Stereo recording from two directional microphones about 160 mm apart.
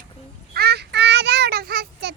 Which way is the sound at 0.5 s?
85° right.